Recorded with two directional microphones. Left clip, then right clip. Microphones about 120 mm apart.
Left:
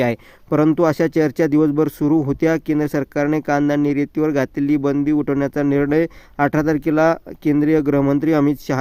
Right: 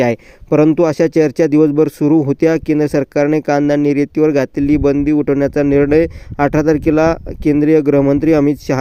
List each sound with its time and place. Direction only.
0.0 s speech: 25° right (ahead or behind)